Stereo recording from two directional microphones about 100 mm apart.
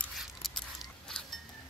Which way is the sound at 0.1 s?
Centre (ahead or behind).